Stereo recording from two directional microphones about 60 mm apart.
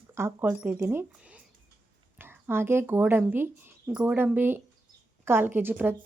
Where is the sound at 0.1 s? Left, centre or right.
Right.